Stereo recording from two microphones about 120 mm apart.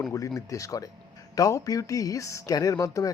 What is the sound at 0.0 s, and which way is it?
A man's voice, 30° left (ahead or behind).